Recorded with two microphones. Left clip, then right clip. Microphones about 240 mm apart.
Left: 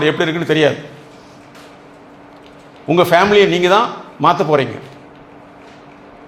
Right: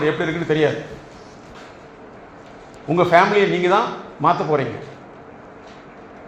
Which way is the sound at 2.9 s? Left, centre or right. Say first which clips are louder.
Left 3 dB; left.